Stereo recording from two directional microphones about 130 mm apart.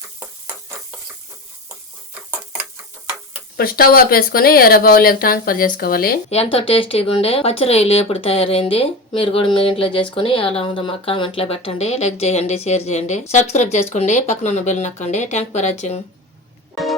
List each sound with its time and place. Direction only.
0.2 s stir: 15° right (ahead or behind)
3.8 s speech: 90° left
6.3 s speech: 50° left (ahead or behind)